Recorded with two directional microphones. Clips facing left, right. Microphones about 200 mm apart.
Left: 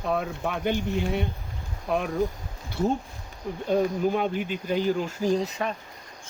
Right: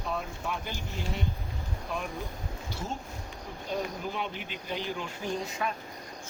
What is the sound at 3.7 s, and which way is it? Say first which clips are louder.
Speech: left 10 dB; 50° left (ahead or behind).